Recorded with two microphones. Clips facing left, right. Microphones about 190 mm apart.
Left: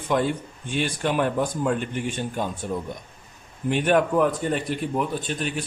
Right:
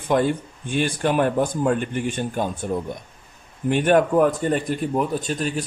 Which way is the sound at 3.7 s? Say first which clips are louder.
Right 3 dB; 45° right (ahead or behind).